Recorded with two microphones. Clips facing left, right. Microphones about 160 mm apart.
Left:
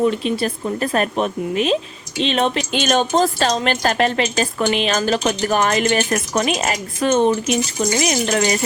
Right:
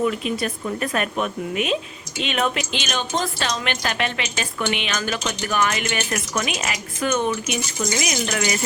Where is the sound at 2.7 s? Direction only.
45° left (ahead or behind).